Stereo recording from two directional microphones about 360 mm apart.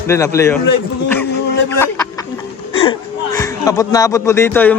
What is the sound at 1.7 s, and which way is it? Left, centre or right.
Speech, centre.